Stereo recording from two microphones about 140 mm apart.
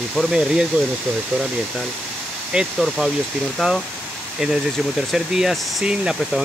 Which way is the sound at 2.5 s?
5° right (ahead or behind).